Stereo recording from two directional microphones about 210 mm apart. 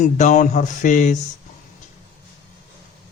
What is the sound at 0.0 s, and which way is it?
A man's voice, 35° left (ahead or behind).